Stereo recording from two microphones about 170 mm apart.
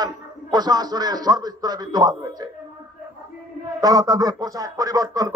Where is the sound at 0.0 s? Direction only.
25° right (ahead or behind).